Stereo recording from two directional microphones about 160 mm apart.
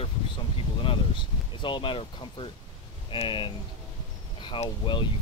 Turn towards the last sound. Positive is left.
turn(degrees=30)  # may be behind; listen again after turning